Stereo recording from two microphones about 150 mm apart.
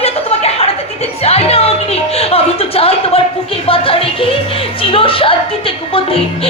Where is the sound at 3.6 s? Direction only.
35° left (ahead or behind).